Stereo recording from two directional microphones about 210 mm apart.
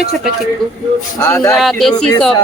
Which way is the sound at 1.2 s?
15° left (ahead or behind).